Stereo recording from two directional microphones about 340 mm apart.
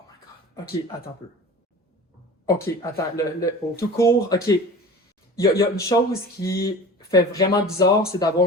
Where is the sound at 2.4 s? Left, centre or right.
Centre.